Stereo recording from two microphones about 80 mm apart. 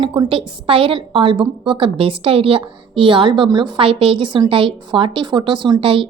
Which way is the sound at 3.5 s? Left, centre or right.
Right.